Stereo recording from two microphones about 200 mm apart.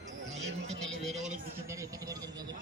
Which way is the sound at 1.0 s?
Centre (ahead or behind).